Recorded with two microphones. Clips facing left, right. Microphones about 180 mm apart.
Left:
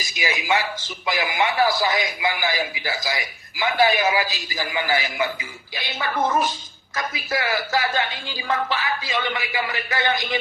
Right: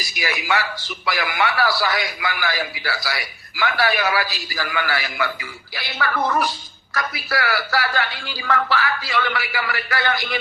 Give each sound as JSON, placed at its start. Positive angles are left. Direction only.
{"t": 0.0, "sound": "a man's voice", "side_deg": 20}